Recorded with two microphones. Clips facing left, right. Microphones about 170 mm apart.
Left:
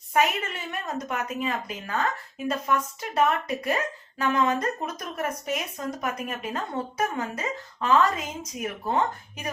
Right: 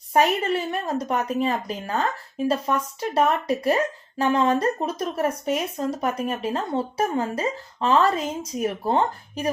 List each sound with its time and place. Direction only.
0.1 s speech: 35° right (ahead or behind)